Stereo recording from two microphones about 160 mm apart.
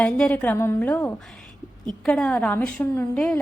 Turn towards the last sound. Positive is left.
turn(degrees=10)  # may be behind; listen again after turning